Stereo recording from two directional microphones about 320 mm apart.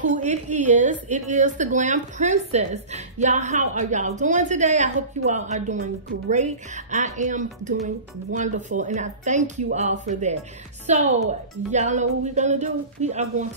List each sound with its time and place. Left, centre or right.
0.0 s a woman's voice: right